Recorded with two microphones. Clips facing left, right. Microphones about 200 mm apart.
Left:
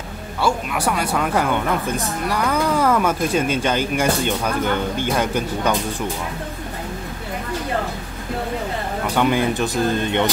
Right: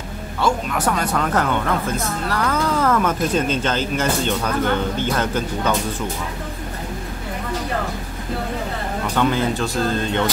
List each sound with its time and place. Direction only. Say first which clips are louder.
0.4 s a woman's voice: even; 10° left (ahead or behind)
9.1 s a woman's voice: left 1 dB; 15° left (ahead or behind)